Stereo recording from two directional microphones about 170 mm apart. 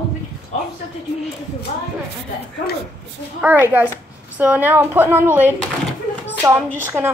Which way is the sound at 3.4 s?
10° right (ahead or behind).